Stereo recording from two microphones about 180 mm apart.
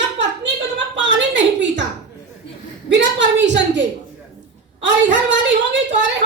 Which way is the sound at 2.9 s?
85° right.